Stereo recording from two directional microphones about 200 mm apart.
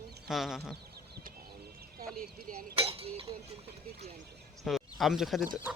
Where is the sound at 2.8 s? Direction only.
30° right (ahead or behind).